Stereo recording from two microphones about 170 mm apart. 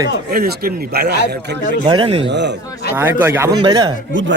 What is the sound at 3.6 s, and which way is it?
Speech, 25° right (ahead or behind).